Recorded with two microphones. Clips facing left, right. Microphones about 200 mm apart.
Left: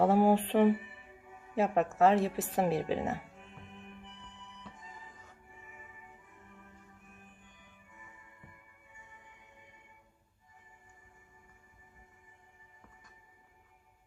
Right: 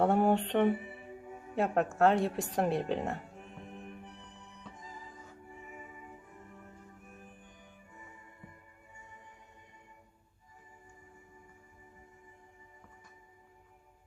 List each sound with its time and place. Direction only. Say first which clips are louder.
0.0 s speech: left 1 dB; 5° left (ahead or behind)
0.8 s music: right 7 dB; 40° right (ahead or behind)
1.5 s speech: left 1 dB; centre (ahead or behind)
3.2 s music: right 5 dB; 40° right (ahead or behind)
6.5 s music: right 4 dB; 40° right (ahead or behind)